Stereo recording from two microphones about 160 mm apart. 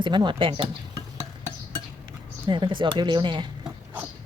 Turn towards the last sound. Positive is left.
turn(degrees=-30)  # may be behind; listen again after turning